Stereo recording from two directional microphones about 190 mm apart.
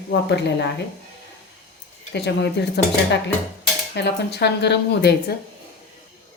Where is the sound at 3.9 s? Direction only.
60° left (ahead or behind).